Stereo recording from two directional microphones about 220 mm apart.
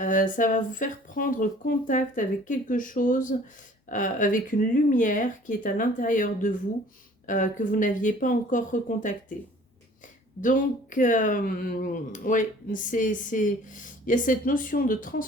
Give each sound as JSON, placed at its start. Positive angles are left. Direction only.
{"t": 0.0, "sound": "speech", "side_deg": 35}
{"t": 10.4, "sound": "speech", "side_deg": 35}